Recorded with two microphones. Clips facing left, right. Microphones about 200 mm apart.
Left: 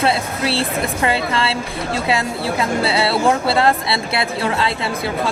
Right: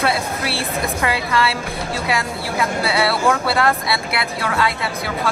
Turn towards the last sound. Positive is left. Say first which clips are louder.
# left 1 dB
turn(degrees=25)  # may be behind; listen again after turning